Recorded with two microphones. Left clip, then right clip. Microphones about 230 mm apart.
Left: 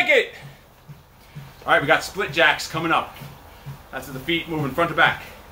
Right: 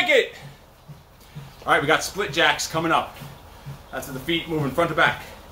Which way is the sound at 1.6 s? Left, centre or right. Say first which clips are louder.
Left 1 dB; centre.